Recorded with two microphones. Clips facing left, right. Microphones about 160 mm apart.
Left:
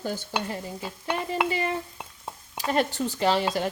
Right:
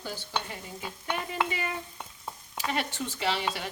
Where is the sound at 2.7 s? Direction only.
40° left (ahead or behind).